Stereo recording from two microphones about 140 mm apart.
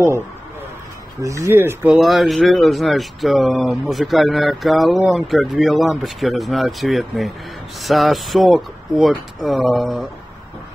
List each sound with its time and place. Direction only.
1.2 s speech: 20° right (ahead or behind)
2.0 s speech: centre (ahead or behind)